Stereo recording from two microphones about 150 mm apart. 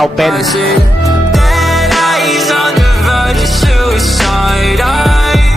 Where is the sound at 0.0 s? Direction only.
Centre (ahead or behind).